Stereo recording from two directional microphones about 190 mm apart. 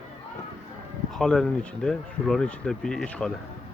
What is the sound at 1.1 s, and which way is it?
Speech, centre (ahead or behind).